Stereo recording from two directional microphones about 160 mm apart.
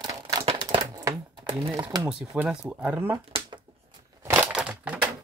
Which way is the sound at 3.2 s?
35° right (ahead or behind).